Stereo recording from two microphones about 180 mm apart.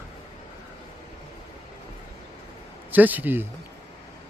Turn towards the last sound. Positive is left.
turn(degrees=-10)  # may be behind; listen again after turning